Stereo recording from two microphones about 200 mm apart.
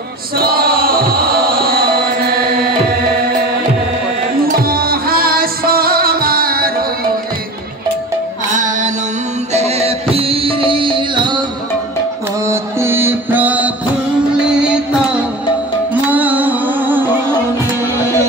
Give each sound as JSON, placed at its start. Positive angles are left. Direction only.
{"t": 0.4, "sound": "music", "side_deg": -50}
{"t": 4.6, "sound": "music", "side_deg": -50}
{"t": 8.5, "sound": "music", "side_deg": -40}
{"t": 12.4, "sound": "music", "side_deg": -10}